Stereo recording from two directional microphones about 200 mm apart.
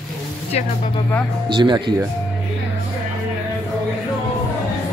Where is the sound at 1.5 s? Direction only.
20° right (ahead or behind).